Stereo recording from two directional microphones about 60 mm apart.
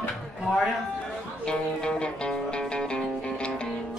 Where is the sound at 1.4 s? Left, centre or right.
Centre.